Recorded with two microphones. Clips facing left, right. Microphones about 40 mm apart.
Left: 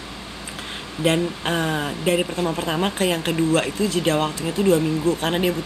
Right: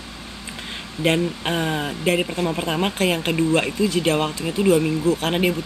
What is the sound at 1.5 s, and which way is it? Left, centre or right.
Speech, centre.